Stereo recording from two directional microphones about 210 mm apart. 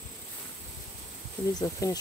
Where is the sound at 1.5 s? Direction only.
15° left (ahead or behind).